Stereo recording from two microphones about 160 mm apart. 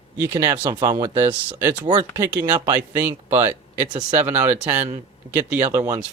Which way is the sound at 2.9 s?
10° right (ahead or behind).